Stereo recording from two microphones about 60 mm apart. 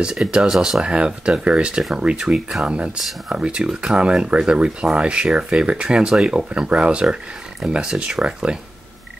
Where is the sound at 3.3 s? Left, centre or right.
Centre.